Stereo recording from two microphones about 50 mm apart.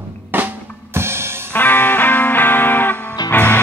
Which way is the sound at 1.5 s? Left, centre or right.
Left.